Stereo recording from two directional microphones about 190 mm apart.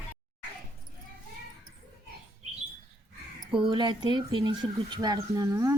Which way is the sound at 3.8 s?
25° right (ahead or behind).